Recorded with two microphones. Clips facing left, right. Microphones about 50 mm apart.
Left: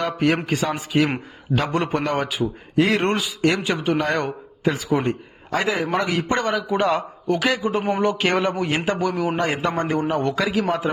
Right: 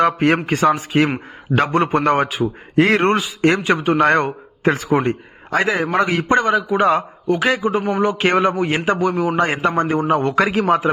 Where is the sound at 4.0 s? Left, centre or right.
Right.